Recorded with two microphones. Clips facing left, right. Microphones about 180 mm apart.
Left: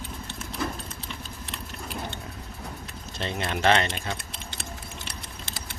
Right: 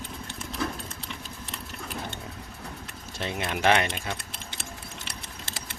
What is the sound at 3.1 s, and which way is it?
Speech, 10° right (ahead or behind).